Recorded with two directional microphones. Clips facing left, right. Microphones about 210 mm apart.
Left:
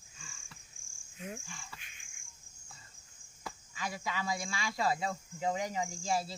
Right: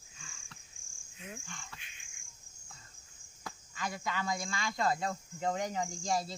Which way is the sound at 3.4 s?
10° left (ahead or behind).